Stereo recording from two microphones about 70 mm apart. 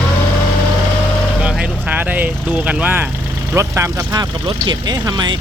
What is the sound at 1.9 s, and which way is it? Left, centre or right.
Speech, right.